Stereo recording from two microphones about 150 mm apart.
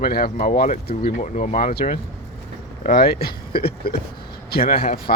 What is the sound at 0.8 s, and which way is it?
A man's voice, 45° left (ahead or behind).